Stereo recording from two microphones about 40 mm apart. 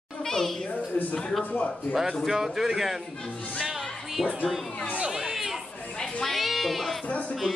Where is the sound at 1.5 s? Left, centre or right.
Left.